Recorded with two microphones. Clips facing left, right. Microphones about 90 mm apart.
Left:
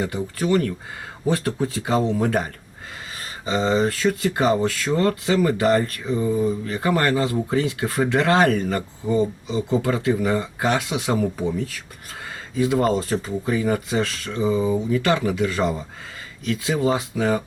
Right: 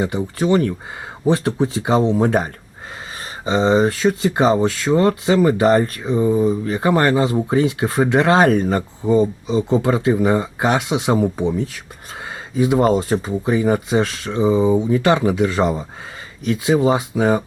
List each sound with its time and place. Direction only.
0.0 s speech: 25° right (ahead or behind)